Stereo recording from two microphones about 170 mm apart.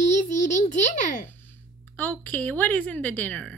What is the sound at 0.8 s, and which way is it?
Speech, 45° left (ahead or behind).